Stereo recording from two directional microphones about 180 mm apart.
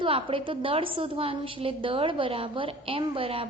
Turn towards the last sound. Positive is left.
turn(degrees=-30)  # may be behind; listen again after turning